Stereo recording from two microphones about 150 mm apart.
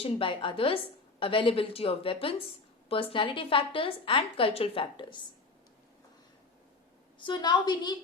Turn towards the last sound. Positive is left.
turn(degrees=30)  # may be behind; listen again after turning